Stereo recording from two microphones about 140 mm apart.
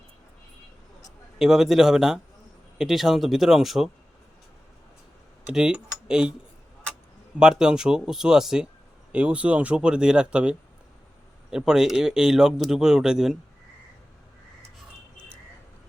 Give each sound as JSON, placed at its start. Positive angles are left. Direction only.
{"t": 1.4, "sound": "a man's voice", "side_deg": 0}
{"t": 5.5, "sound": "speech", "side_deg": -5}
{"t": 7.3, "sound": "a man's voice", "side_deg": -5}
{"t": 11.5, "sound": "a man's voice", "side_deg": -5}